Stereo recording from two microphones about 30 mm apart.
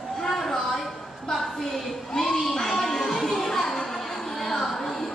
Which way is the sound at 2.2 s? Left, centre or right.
Centre.